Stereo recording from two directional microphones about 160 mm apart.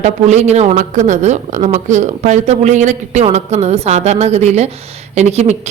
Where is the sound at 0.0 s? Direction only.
45° right (ahead or behind).